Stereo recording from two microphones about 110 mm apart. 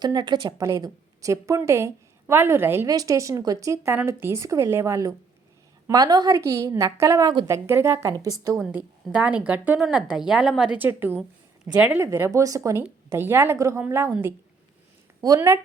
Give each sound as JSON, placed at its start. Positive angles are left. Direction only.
{"t": 0.0, "sound": "a woman's voice", "side_deg": -40}
{"t": 0.6, "sound": "a woman's voice", "side_deg": -30}
{"t": 9.0, "sound": "speech", "side_deg": -10}
{"t": 10.8, "sound": "speech", "side_deg": -20}
{"t": 11.2, "sound": "a sound", "side_deg": -10}
{"t": 11.9, "sound": "a woman's voice", "side_deg": -25}
{"t": 15.2, "sound": "a woman's voice", "side_deg": -35}